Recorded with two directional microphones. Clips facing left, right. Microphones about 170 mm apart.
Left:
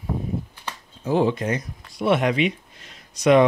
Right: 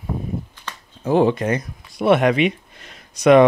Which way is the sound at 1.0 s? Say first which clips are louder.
Right 4 dB; 60° right (ahead or behind).